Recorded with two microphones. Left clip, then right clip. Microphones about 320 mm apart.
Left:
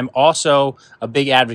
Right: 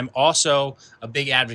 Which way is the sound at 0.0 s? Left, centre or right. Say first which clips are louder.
Left 5 dB; centre.